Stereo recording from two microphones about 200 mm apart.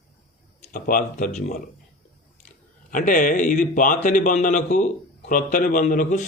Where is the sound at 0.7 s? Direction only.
40° left (ahead or behind).